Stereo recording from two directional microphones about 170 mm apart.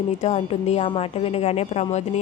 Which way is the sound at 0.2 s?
40° left (ahead or behind).